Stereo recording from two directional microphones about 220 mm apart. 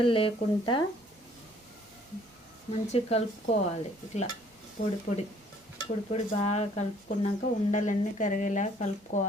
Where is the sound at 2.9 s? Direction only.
30° left (ahead or behind).